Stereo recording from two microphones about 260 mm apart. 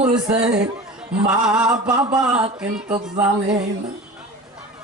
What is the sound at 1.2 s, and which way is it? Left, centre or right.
Speech, centre.